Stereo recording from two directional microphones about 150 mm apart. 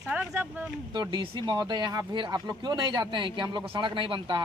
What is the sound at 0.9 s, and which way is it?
Speech, 30° right (ahead or behind).